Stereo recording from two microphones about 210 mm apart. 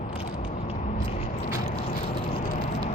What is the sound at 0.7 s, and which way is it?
Biting, 30° left (ahead or behind).